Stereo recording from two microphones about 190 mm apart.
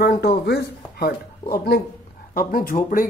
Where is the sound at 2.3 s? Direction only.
50° left (ahead or behind).